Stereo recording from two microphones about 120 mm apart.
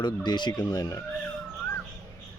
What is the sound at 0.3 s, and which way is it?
Speech, 35° left (ahead or behind).